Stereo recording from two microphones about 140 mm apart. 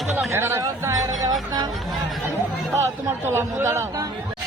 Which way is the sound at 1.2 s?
30° right (ahead or behind).